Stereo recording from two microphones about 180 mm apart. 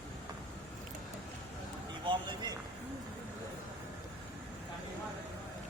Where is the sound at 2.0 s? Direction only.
25° right (ahead or behind).